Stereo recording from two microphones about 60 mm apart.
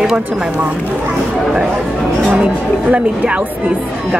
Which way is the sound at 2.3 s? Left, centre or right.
Right.